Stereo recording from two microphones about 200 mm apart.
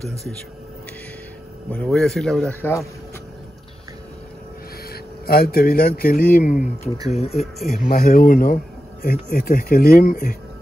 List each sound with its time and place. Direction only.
1.7 s speech: 5° left (ahead or behind)
4.9 s speech: 50° left (ahead or behind)
7.1 s speech: 30° left (ahead or behind)
7.8 s speech: 45° left (ahead or behind)